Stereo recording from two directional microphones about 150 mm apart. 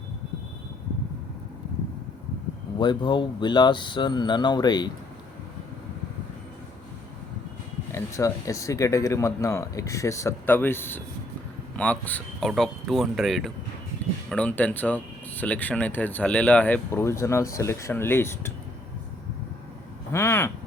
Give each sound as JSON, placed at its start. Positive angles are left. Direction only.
{"t": 2.7, "sound": "speech", "side_deg": 30}
{"t": 7.9, "sound": "speech", "side_deg": 20}
{"t": 20.1, "sound": "speech", "side_deg": 15}